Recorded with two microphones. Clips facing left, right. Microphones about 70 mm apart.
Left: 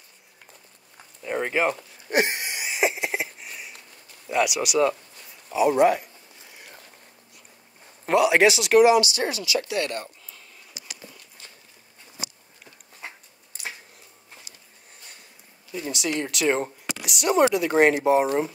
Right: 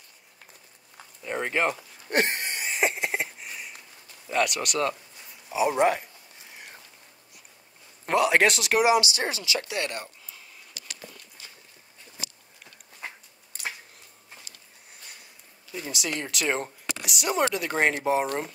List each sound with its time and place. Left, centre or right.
1.2 s a sound: centre
4.3 s speech: centre
5.5 s speech: centre
8.0 s speech: centre
8.8 s speech: right
10.7 s a sound: centre
15.7 s speech: centre